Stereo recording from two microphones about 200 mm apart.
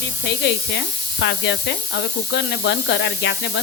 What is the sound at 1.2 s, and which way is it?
Speech, 60° left (ahead or behind).